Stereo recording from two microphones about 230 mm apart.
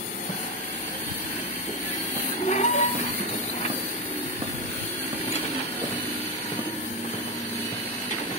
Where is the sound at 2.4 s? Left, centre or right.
Left.